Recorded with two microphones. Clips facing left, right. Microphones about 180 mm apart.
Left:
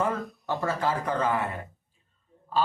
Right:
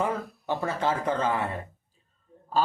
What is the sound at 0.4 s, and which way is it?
Speech, 20° right (ahead or behind).